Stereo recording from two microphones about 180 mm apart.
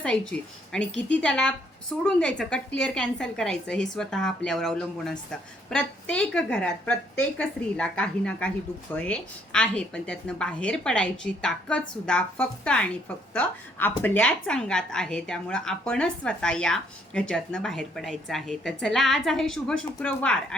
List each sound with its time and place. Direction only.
0.0 s a woman's voice: 5° left (ahead or behind)